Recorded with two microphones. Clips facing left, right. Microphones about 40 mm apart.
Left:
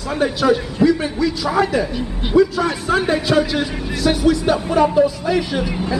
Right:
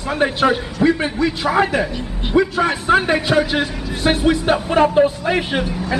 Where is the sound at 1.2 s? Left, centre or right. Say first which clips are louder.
Right 1 dB; right.